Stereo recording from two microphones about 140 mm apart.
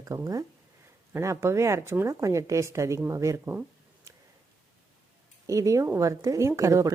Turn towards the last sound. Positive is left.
turn(degrees=-20)  # may be behind; listen again after turning